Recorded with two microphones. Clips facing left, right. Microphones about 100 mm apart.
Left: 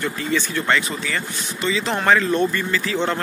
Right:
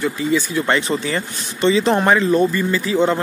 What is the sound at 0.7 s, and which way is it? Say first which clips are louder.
Speech: right 3 dB; 25° right (ahead or behind).